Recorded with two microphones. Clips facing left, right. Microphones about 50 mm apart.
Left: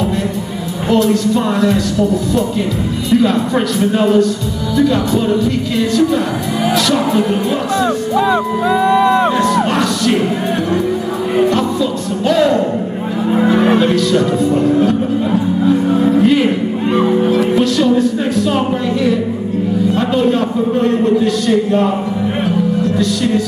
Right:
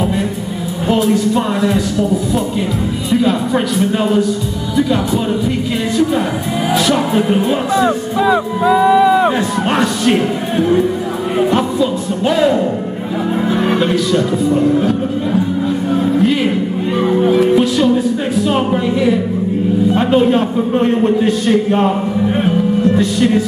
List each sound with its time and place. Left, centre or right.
0.8 s music: centre
3.1 s a man's voice: centre
4.7 s music: centre
6.7 s music: centre
8.2 s speech: centre
9.7 s a man's voice: right
11.3 s music: centre
14.1 s a man's voice: centre
16.2 s a man's voice: centre
17.2 s music: centre
19.9 s a man's voice: right
22.9 s a man's voice: right